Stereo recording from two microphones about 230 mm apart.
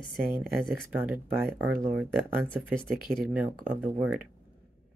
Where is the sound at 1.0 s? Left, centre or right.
Centre.